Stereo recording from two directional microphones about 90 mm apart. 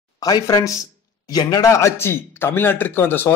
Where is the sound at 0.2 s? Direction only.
45° left (ahead or behind).